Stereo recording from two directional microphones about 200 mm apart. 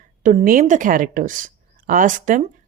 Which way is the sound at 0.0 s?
40° right (ahead or behind).